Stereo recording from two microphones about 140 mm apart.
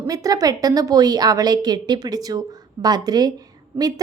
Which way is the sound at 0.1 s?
25° right (ahead or behind).